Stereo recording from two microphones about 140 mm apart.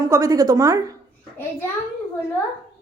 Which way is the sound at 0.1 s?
25° right (ahead or behind).